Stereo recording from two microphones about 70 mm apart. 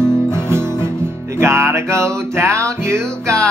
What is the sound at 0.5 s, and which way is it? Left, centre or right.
Music, right.